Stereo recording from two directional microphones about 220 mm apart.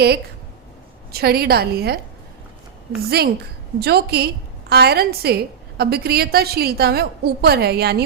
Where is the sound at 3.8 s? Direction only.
45° right (ahead or behind).